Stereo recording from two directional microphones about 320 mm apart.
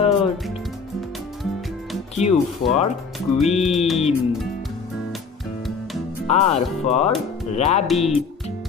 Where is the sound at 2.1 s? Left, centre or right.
Centre.